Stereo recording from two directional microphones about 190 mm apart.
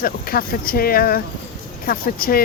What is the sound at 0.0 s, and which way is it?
Speech, 50° left (ahead or behind).